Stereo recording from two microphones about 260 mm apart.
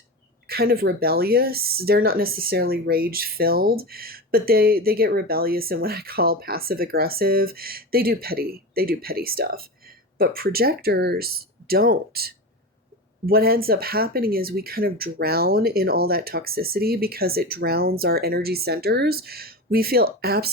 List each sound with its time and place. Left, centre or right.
0.4 s speech: right